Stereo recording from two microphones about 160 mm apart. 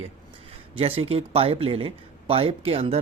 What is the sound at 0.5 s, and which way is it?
A man's voice, 35° right (ahead or behind).